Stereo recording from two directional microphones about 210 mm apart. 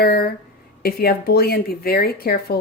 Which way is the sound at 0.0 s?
50° left (ahead or behind).